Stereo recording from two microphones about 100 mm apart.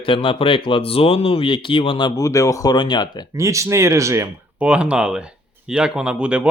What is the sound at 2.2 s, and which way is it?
Speech, 35° left (ahead or behind).